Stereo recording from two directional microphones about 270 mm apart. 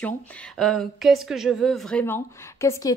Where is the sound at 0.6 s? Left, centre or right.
Centre.